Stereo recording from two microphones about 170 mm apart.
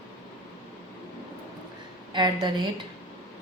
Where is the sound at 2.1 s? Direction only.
25° right (ahead or behind).